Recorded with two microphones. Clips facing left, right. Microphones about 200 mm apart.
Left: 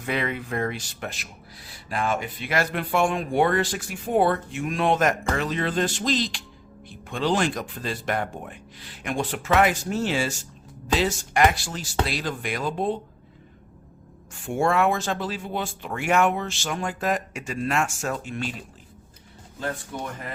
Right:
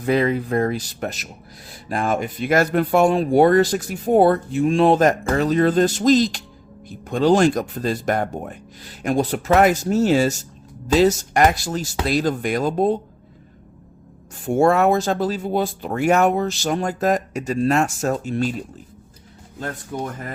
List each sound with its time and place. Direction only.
0.0 s speech: 35° right (ahead or behind)
14.3 s speech: 40° right (ahead or behind)